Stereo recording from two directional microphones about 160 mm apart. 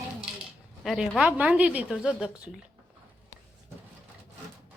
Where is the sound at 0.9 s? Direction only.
Centre (ahead or behind).